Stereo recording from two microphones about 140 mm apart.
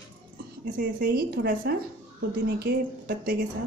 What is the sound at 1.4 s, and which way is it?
Speech, 90° right.